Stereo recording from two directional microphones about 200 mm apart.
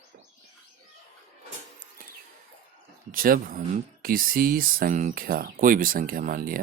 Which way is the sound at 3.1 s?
45° right (ahead or behind).